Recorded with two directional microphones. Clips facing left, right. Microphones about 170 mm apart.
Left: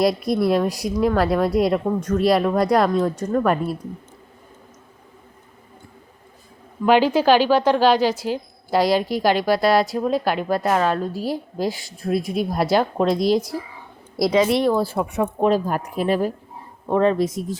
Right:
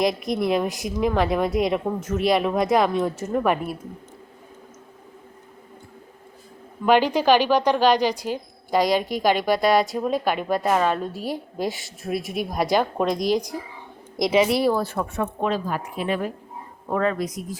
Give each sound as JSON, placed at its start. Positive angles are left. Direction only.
{"t": 0.0, "sound": "speech", "side_deg": 0}
{"t": 6.8, "sound": "speech", "side_deg": 5}
{"t": 13.3, "sound": "speech", "side_deg": -15}
{"t": 14.9, "sound": "speech", "side_deg": 15}
{"t": 15.4, "sound": "speech", "side_deg": 40}